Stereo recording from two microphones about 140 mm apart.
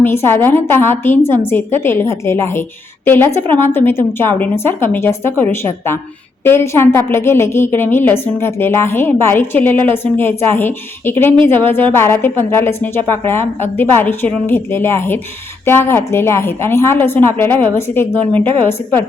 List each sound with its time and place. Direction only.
0.0 s a woman's voice: 15° left (ahead or behind)